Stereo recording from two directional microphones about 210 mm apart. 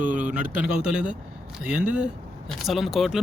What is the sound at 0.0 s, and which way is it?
Speech, 40° right (ahead or behind).